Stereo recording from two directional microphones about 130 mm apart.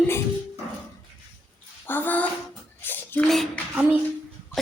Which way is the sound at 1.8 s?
15° left (ahead or behind).